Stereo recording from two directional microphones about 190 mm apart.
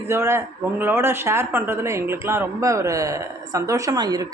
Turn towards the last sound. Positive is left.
turn(degrees=-20)  # may be behind; listen again after turning